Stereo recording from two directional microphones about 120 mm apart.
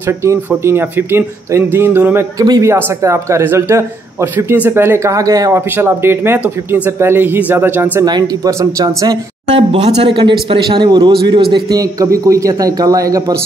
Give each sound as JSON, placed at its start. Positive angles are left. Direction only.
{"t": 0.0, "sound": "a man's voice", "side_deg": -20}
{"t": 2.3, "sound": "a man's voice", "side_deg": -30}
{"t": 8.0, "sound": "speech", "side_deg": -35}
{"t": 9.7, "sound": "speech", "side_deg": -55}
{"t": 10.1, "sound": "a man's voice", "side_deg": -45}
{"t": 11.5, "sound": "a man's voice", "side_deg": -30}